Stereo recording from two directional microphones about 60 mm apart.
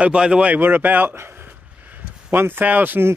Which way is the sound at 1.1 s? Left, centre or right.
Right.